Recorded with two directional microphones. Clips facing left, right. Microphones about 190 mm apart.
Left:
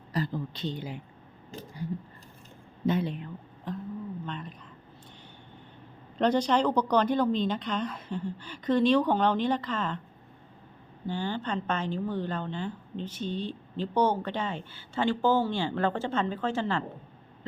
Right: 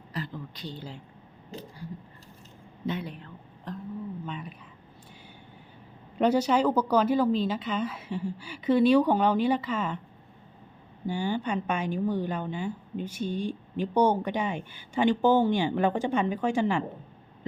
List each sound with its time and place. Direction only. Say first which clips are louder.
0.1 s speech: left 5 dB; 40° left (ahead or behind)
0.5 s speech: left 5 dB; 20° left (ahead or behind)
3.0 s speech: left 6 dB; 25° left (ahead or behind)
3.7 s a woman's voice: even; centre (ahead or behind)
6.1 s a woman's voice: right 1 dB; 10° right (ahead or behind)
11.0 s a woman's voice: right 3 dB; 10° right (ahead or behind)